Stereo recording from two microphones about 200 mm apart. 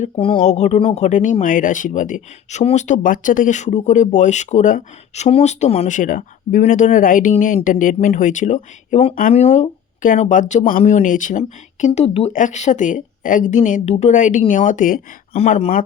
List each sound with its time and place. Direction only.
0.0 s speech: 30° left (ahead or behind)